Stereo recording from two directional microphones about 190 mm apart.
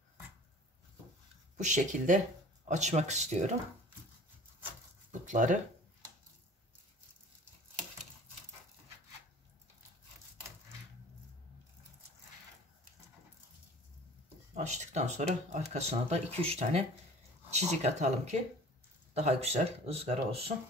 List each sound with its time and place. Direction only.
1.6 s speech: 40° right (ahead or behind)
5.2 s speech: 40° right (ahead or behind)
14.5 s speech: 40° right (ahead or behind)